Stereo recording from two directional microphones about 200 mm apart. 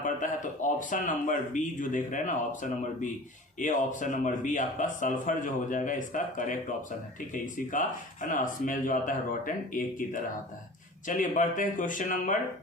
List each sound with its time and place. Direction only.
0.0 s speech: 40° left (ahead or behind)